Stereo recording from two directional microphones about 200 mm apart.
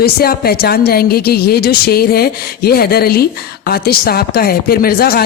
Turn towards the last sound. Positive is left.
turn(degrees=50)  # may be behind; listen again after turning